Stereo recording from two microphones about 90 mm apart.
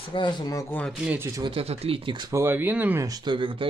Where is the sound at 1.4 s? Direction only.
90° right.